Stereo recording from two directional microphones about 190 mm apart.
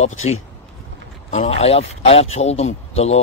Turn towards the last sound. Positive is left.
turn(degrees=35)  # may be behind; listen again after turning